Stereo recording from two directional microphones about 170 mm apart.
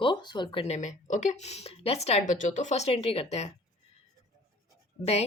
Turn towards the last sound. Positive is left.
turn(degrees=40)  # may be behind; listen again after turning